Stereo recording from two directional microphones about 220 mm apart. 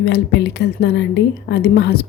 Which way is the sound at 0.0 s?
50° left (ahead or behind).